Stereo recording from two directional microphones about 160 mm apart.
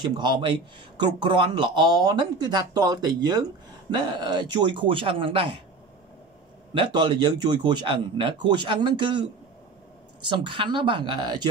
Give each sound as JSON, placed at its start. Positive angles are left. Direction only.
{"t": 0.0, "sound": "a man's voice", "side_deg": -30}
{"t": 6.7, "sound": "a man's voice", "side_deg": -30}
{"t": 10.2, "sound": "speech", "side_deg": -30}